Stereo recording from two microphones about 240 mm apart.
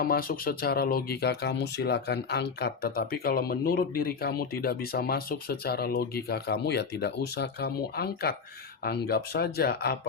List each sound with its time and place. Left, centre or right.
0.0 s speech: left